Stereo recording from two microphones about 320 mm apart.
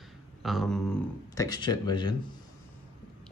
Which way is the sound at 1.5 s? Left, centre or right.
Centre.